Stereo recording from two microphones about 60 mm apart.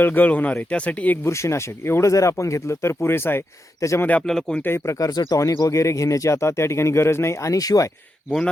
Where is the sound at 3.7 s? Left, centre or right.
Left.